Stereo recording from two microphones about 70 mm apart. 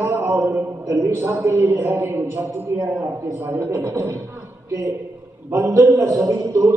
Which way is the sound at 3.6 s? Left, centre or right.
Right.